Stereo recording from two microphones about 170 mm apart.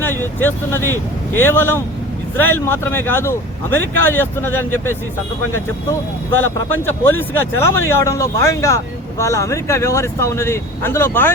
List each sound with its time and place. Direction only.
0.3 s speech: 10° left (ahead or behind)
0.8 s speech: 15° right (ahead or behind)
1.4 s speech: 15° left (ahead or behind)
6.4 s speech: 10° left (ahead or behind)